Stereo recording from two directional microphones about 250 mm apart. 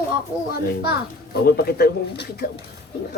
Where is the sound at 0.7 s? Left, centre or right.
Left.